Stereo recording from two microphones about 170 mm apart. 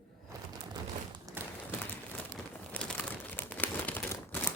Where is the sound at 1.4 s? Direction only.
10° right (ahead or behind).